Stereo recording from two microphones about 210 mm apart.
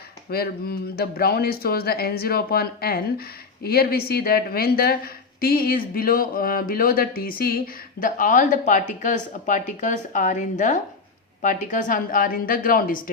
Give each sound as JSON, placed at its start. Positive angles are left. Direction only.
{"t": 0.3, "sound": "a woman's voice", "side_deg": 45}